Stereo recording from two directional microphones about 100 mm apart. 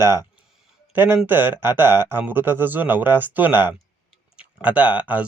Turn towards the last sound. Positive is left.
turn(degrees=-15)  # may be behind; listen again after turning